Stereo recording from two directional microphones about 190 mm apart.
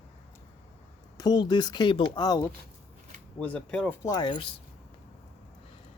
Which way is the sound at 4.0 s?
20° left (ahead or behind).